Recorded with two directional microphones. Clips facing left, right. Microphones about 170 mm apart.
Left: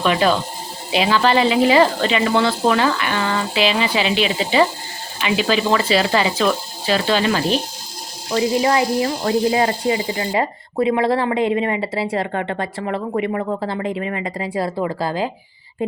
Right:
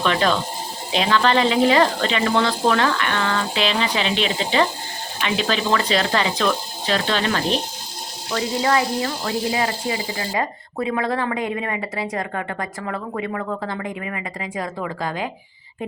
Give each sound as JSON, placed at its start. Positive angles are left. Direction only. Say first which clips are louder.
{"t": 0.0, "sound": "speech", "louder": "left 3 dB", "side_deg": 10}
{"t": 8.3, "sound": "speech", "louder": "left 4 dB", "side_deg": 25}